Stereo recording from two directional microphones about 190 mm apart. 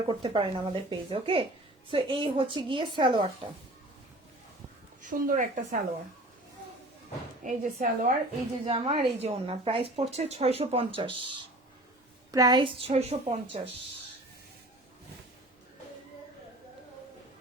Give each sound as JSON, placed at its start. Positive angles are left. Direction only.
{"t": 0.1, "sound": "a woman's voice", "side_deg": -25}
{"t": 5.0, "sound": "a woman's voice", "side_deg": -45}
{"t": 7.4, "sound": "a woman's voice", "side_deg": -45}
{"t": 8.6, "sound": "a woman's voice", "side_deg": -30}